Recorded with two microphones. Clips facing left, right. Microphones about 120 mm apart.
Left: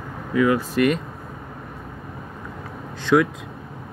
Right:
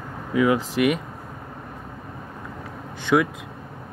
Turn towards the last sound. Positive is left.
turn(degrees=-10)  # may be behind; listen again after turning